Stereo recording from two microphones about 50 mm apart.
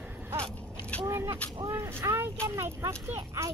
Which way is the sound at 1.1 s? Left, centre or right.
Right.